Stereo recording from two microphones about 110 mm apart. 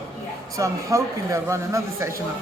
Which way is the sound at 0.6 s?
30° right (ahead or behind).